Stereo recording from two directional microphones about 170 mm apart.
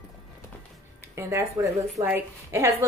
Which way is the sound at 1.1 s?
20° right (ahead or behind).